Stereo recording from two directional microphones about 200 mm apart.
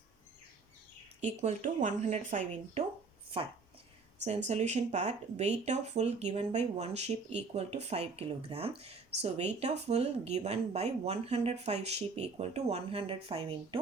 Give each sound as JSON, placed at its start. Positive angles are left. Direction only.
{"t": 1.2, "sound": "speech", "side_deg": -35}
{"t": 4.4, "sound": "speech", "side_deg": -35}